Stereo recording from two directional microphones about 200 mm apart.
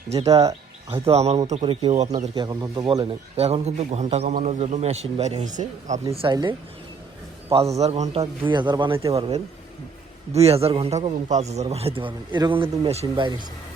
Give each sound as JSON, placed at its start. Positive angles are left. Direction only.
{"t": 0.1, "sound": "a man's voice", "side_deg": -30}
{"t": 6.1, "sound": "a man's voice", "side_deg": -20}